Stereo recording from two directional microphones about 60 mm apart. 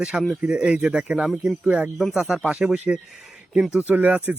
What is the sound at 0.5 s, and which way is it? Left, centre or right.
Speech, centre.